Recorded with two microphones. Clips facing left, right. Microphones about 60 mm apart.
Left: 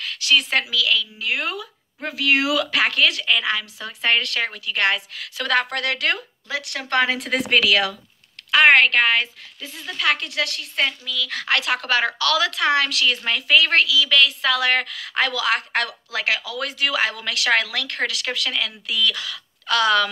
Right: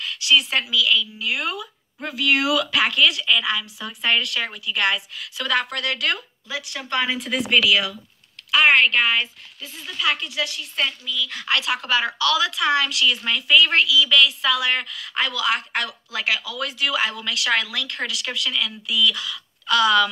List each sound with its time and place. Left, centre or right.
0.2 s a woman's voice: left
1.3 s a woman's voice: left
6.6 s speech: left
10.9 s a woman's voice: left
16.3 s a woman's voice: left